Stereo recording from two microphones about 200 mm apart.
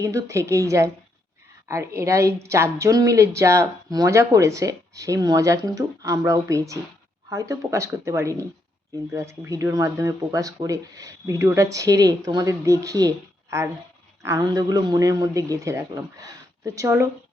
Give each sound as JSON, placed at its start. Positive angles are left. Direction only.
{"t": 0.0, "sound": "a woman's voice", "side_deg": -15}